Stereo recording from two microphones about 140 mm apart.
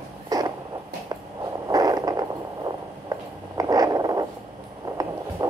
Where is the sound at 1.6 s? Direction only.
25° right (ahead or behind).